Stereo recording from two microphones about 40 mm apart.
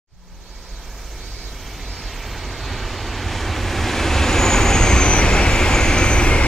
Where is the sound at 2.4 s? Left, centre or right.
Centre.